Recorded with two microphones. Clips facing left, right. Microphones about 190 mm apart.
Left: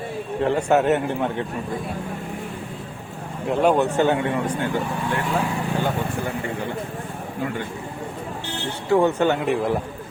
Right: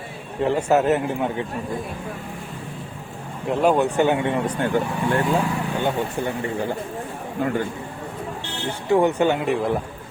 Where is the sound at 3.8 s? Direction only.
15° right (ahead or behind).